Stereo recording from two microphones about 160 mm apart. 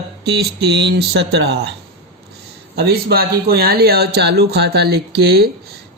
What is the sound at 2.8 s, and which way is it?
Speech, 80° right.